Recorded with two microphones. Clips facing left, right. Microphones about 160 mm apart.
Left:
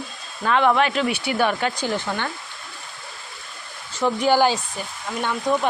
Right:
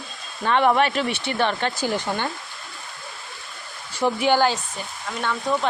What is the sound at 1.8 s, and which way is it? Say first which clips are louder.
Speech: right 1 dB; 15° right (ahead or behind).